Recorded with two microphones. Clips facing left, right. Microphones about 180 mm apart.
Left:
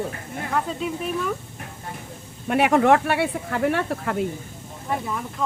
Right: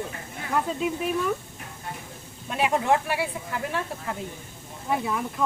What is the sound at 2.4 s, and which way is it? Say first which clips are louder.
Speech: left 6 dB; 65° left (ahead or behind).